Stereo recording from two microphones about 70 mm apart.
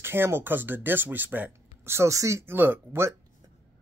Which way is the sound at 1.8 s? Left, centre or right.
Right.